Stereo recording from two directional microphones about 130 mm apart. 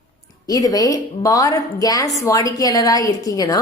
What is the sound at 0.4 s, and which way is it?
A woman's voice, 30° left (ahead or behind).